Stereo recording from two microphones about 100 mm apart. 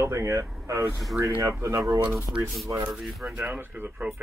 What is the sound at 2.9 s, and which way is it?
Speech, centre (ahead or behind).